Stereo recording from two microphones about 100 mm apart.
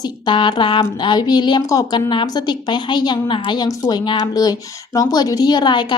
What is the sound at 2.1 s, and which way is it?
Speech, 50° left (ahead or behind).